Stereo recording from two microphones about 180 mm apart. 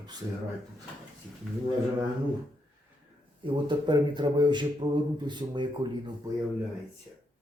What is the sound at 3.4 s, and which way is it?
Speech, 25° right (ahead or behind).